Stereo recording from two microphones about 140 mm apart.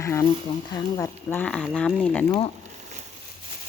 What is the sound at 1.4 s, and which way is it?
Speech, 5° left (ahead or behind).